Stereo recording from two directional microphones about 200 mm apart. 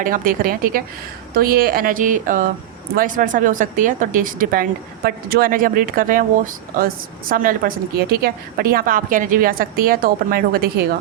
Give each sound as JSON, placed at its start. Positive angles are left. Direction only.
{"t": 0.0, "sound": "speech", "side_deg": -45}